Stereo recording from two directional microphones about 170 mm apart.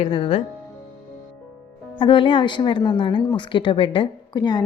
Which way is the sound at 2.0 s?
30° left (ahead or behind).